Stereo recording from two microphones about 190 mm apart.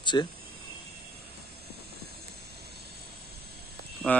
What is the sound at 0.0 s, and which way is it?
Speech, 25° left (ahead or behind).